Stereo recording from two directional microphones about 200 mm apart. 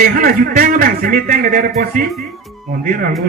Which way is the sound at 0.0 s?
45° right (ahead or behind).